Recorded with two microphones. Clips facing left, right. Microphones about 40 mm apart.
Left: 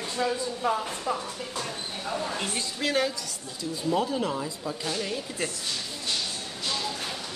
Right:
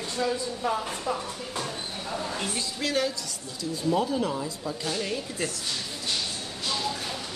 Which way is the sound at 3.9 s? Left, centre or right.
Centre.